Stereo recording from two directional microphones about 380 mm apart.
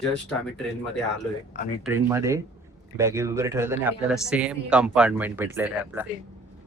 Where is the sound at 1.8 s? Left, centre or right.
Centre.